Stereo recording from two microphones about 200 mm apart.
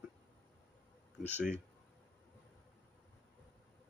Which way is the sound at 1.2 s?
10° right (ahead or behind).